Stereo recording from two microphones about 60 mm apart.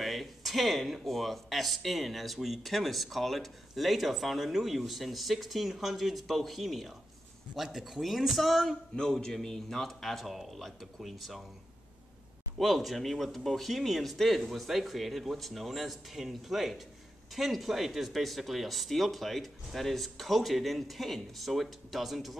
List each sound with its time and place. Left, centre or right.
0.0 s speech: centre
12.5 s speech: centre